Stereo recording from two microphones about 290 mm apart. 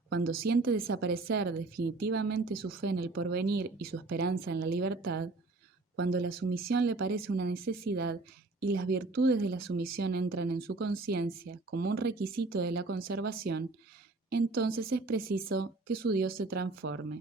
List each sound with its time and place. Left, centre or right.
0.1 s speech: right